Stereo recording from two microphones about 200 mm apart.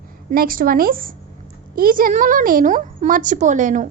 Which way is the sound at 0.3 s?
45° right (ahead or behind).